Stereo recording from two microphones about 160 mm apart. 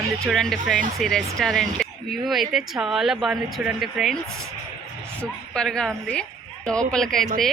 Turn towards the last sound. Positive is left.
turn(degrees=5)  # may be behind; listen again after turning